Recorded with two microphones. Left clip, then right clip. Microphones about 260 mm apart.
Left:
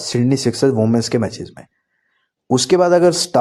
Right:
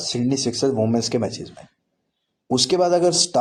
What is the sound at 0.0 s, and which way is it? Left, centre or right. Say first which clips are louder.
Speech: left 5 dB; left.